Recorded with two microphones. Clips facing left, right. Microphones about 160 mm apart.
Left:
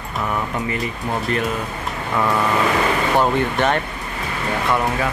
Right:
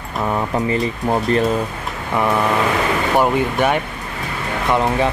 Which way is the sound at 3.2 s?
10° right (ahead or behind).